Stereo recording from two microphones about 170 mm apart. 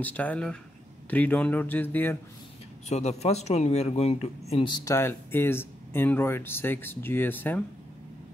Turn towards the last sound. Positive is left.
turn(degrees=10)  # may be behind; listen again after turning